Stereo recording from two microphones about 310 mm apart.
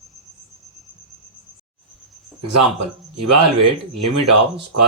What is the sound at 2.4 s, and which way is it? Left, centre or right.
Speech, right.